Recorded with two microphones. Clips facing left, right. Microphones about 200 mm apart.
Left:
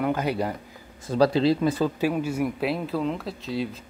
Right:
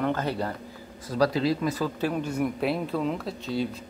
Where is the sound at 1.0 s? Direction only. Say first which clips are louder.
Left 4 dB; 30° left (ahead or behind).